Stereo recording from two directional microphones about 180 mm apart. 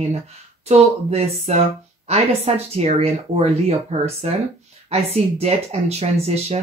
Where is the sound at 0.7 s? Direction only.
35° right (ahead or behind).